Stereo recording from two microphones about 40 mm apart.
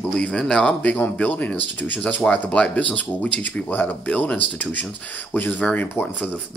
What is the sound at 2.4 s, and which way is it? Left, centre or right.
Speech, left.